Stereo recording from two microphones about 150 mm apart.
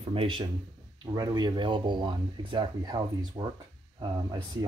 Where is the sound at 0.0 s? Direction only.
35° right (ahead or behind).